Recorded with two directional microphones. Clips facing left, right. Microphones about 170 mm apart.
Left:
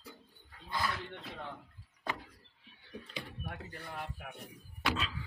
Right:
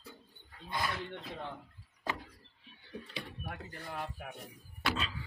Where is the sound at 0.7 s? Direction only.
20° right (ahead or behind).